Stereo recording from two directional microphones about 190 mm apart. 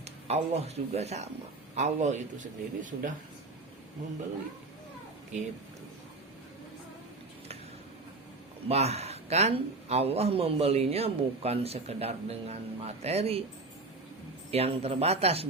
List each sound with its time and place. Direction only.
0.0 s a man's voice: 35° right (ahead or behind)
8.6 s a man's voice: 35° right (ahead or behind)
14.5 s a man's voice: 30° right (ahead or behind)